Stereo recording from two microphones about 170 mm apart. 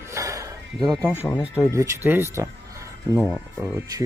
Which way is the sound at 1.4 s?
10° right (ahead or behind).